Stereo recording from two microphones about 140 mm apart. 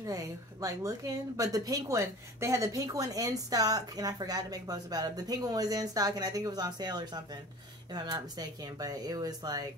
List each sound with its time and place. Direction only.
0.0 s a woman's voice: 25° right (ahead or behind)